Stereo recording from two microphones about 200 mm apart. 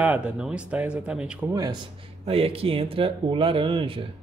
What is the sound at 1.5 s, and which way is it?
Speech, 20° right (ahead or behind).